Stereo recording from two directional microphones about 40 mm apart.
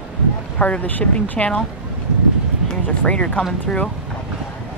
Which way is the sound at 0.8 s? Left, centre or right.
Left.